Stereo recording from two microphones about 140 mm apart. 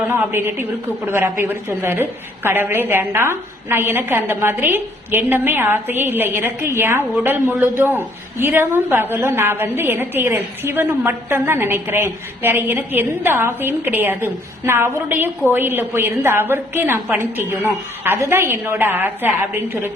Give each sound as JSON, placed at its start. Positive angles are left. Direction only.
{"t": 0.1, "sound": "a woman's voice", "side_deg": -15}